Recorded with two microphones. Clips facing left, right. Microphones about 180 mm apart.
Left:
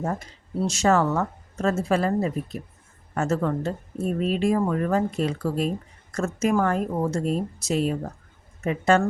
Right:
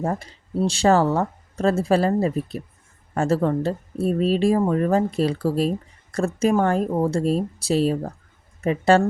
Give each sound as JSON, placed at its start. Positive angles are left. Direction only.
{"t": 0.0, "sound": "speech", "side_deg": -30}
{"t": 3.2, "sound": "speech", "side_deg": -30}